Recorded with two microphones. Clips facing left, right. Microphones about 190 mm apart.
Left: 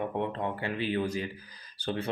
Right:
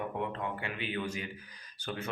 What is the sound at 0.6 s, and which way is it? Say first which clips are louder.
Speech: left 6 dB; 35° left (ahead or behind).